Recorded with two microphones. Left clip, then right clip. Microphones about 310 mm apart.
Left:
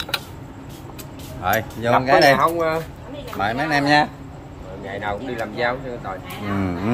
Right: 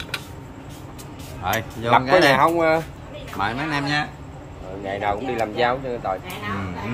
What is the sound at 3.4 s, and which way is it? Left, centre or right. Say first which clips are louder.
Speech: left 4 dB; centre.